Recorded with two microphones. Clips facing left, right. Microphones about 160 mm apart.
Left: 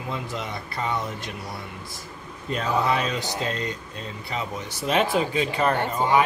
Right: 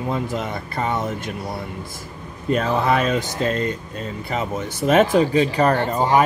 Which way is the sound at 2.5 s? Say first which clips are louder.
Right 4 dB; 55° right (ahead or behind).